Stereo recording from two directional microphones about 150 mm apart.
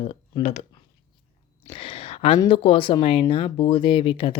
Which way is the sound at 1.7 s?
35° left (ahead or behind).